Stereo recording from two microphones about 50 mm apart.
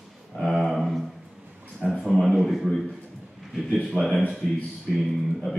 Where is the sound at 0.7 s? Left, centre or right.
Centre.